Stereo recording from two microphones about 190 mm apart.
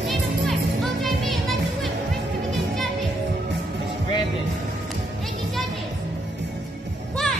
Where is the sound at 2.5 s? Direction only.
Centre (ahead or behind).